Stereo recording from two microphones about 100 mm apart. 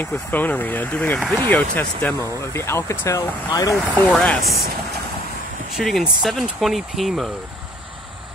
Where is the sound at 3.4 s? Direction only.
40° left (ahead or behind).